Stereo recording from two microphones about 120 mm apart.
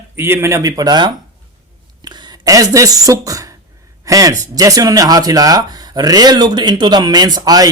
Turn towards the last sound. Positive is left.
turn(degrees=-30)  # may be behind; listen again after turning